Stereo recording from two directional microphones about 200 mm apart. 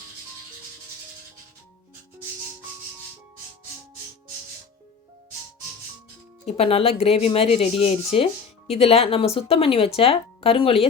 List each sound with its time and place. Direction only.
6.4 s speech: 30° left (ahead or behind)